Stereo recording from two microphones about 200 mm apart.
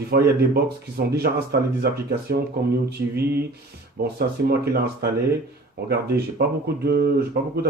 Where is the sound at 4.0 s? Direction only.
50° right (ahead or behind).